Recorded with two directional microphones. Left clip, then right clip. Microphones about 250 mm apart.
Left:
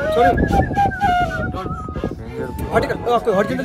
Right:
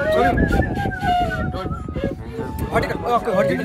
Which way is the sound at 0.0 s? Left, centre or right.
Centre.